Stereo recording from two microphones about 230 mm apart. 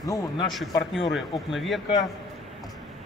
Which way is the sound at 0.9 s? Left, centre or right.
Centre.